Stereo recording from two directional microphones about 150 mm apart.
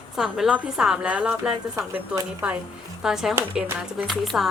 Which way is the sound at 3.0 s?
5° right (ahead or behind).